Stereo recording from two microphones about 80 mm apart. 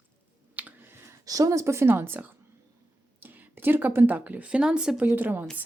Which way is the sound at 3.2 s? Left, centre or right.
Right.